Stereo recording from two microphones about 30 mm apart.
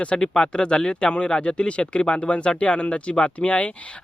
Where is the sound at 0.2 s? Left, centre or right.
Left.